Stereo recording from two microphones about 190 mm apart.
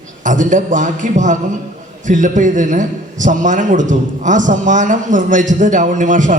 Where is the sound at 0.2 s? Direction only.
40° right (ahead or behind).